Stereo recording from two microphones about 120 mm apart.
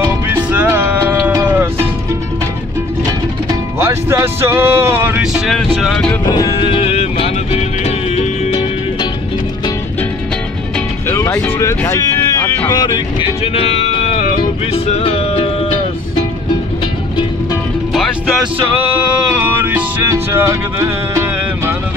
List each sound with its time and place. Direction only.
0.0 s music: 15° right (ahead or behind)
3.8 s speech: 20° right (ahead or behind)
5.3 s vehicle: centre (ahead or behind)
5.8 s music: 5° left (ahead or behind)
6.2 s music: 30° left (ahead or behind)
6.5 s music: 50° left (ahead or behind)
11.1 s a sound: 25° left (ahead or behind)
12.7 s music: 40° left (ahead or behind)
13.4 s music: 60° left (ahead or behind)
19.1 s music: 15° right (ahead or behind)